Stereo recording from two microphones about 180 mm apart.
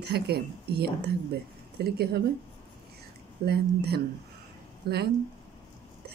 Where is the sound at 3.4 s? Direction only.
65° right (ahead or behind).